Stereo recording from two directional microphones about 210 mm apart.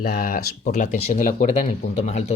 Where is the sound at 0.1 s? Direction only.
45° left (ahead or behind).